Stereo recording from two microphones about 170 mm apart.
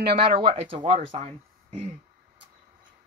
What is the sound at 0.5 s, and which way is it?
Speech, 30° right (ahead or behind).